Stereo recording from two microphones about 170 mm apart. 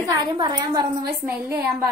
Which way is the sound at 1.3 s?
5° right (ahead or behind).